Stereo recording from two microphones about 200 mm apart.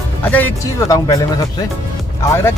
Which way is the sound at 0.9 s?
20° left (ahead or behind).